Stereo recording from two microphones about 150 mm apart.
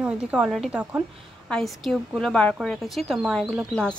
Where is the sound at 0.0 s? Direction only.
5° right (ahead or behind).